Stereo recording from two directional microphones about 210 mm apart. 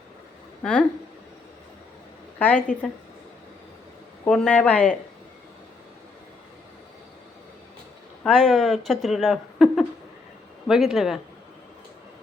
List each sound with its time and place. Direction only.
0.6 s a woman's voice: 5° left (ahead or behind)
2.4 s speech: 10° left (ahead or behind)
4.3 s speech: 5° left (ahead or behind)
8.2 s speech: centre (ahead or behind)